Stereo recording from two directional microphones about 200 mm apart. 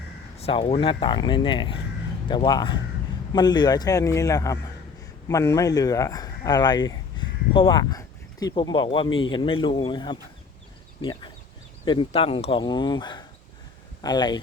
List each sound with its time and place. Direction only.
0.3 s speech: 30° left (ahead or behind)
7.2 s a sound: 25° left (ahead or behind)
7.5 s speech: 25° left (ahead or behind)